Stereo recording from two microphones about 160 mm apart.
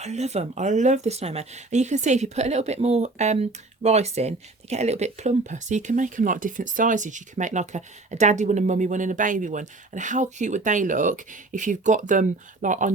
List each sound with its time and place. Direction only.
0.0 s speech: 45° right (ahead or behind)